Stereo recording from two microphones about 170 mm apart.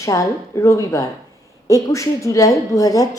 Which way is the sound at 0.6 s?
15° left (ahead or behind).